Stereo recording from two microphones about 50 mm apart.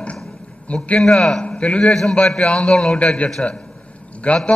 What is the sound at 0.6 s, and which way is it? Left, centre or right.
Speech, left.